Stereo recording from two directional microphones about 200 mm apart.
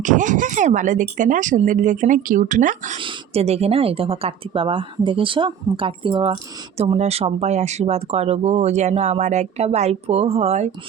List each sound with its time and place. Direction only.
0.0 s a woman's voice: 40° right (ahead or behind)
3.0 s a woman's voice: 30° right (ahead or behind)